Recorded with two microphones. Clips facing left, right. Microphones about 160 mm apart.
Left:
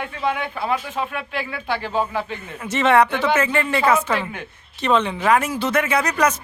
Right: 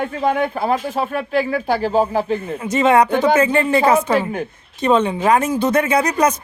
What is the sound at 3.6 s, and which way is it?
Speech, 35° right (ahead or behind).